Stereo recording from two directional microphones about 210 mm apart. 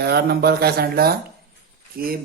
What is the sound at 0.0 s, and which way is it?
Speech, 50° right (ahead or behind).